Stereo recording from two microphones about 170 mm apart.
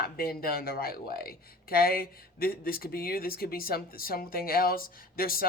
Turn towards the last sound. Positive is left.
turn(degrees=60)  # may be behind; listen again after turning